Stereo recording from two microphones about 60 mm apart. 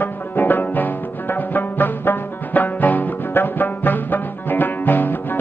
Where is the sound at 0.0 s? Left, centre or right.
Left.